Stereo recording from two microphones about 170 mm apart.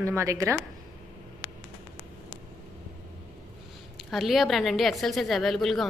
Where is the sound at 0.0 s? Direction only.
15° right (ahead or behind).